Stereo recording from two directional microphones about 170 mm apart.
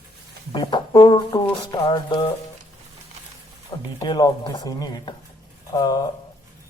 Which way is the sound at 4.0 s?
25° left (ahead or behind).